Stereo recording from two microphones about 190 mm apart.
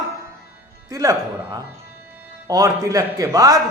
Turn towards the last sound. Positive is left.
turn(degrees=-20)  # may be behind; listen again after turning